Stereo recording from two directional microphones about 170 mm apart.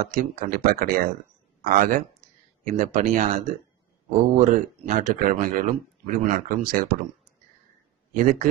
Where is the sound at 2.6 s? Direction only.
45° right (ahead or behind).